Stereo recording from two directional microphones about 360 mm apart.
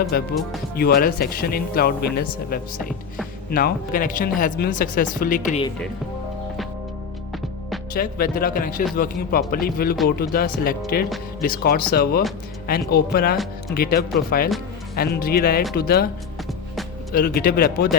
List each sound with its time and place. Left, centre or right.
0.1 s a man's voice: left
7.9 s a man's voice: left
13.3 s speech: centre
13.7 s a man's voice: left
17.1 s a man's voice: left